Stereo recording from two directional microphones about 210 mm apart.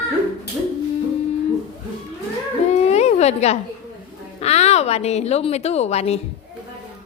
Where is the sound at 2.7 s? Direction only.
30° left (ahead or behind).